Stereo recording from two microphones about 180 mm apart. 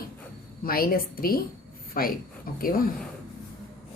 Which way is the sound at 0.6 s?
55° left (ahead or behind).